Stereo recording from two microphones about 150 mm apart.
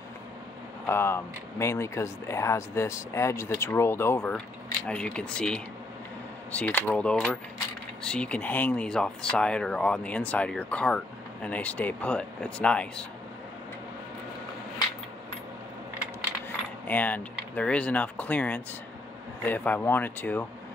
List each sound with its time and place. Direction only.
0.8 s speech: 15° left (ahead or behind)
16.8 s speech: 10° left (ahead or behind)